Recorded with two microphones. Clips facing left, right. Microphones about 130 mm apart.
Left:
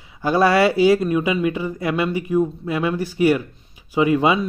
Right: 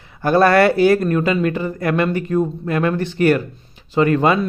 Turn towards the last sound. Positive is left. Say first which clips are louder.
# right 2 dB
turn(degrees=10)  # may be behind; listen again after turning